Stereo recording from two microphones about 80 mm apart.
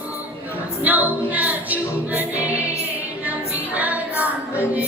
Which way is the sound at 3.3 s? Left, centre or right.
Centre.